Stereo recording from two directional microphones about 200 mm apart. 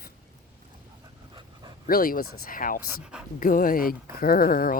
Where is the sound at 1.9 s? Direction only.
45° left (ahead or behind).